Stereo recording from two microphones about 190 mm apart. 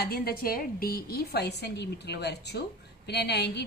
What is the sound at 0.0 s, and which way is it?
A woman's voice, 50° left (ahead or behind).